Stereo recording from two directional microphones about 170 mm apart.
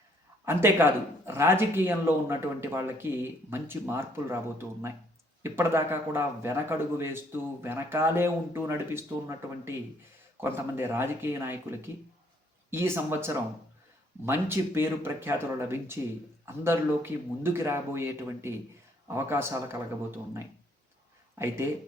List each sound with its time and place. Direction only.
0.4 s speech: 15° right (ahead or behind)